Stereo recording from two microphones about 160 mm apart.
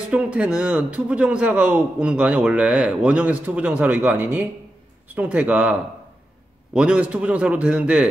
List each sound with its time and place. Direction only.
0.1 s a man's voice: 10° right (ahead or behind)